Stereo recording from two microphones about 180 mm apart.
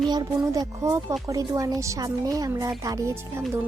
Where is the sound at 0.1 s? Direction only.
20° right (ahead or behind).